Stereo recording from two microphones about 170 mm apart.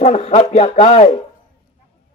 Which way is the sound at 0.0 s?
40° left (ahead or behind).